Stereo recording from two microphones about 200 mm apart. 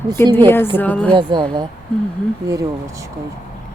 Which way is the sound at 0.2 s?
10° left (ahead or behind).